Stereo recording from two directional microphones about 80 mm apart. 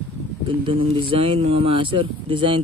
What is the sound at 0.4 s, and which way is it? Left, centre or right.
Speech, right.